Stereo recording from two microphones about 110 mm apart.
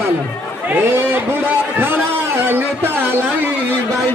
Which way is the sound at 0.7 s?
20° right (ahead or behind).